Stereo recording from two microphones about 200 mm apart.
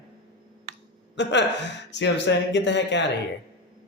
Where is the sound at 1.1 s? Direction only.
60° left (ahead or behind).